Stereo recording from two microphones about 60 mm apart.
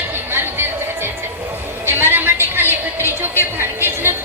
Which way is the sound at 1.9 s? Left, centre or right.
Right.